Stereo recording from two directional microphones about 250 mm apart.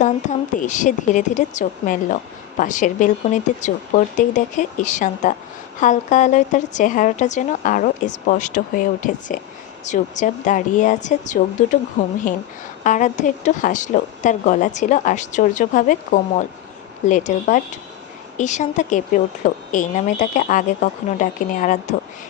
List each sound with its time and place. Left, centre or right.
0.0 s a woman's voice: left
12.8 s a woman's voice: left